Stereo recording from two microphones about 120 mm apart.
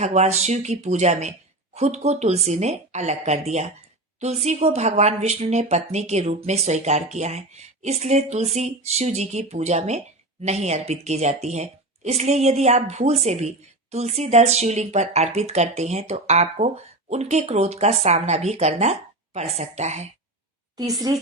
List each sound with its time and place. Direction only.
0.0 s speech: 70° right (ahead or behind)
20.7 s a woman's voice: 30° right (ahead or behind)